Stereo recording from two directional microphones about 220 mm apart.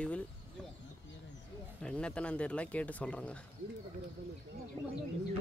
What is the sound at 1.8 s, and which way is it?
Speech, 5° left (ahead or behind).